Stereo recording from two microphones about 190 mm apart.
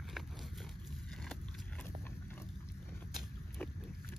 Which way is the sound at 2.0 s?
10° left (ahead or behind).